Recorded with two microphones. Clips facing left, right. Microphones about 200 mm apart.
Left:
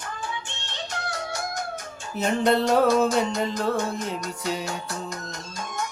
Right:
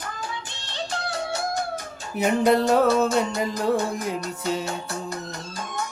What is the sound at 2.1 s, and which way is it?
Music, 10° right (ahead or behind).